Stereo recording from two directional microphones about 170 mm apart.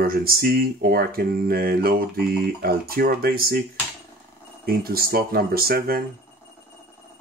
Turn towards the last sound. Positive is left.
turn(degrees=-60)  # may be behind; listen again after turning